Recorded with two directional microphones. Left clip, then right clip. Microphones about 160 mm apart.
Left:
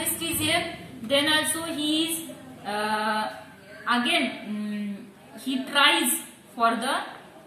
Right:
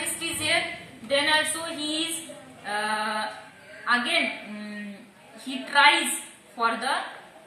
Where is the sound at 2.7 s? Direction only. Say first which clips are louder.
Even; 15° right (ahead or behind).